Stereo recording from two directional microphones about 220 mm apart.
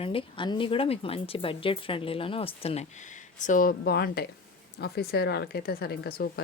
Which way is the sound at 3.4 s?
35° left (ahead or behind).